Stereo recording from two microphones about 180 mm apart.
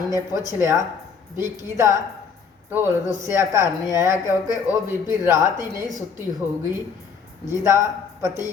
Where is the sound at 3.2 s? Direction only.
15° right (ahead or behind).